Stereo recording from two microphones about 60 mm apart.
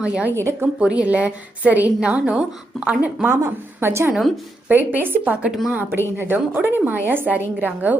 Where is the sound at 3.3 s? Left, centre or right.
Right.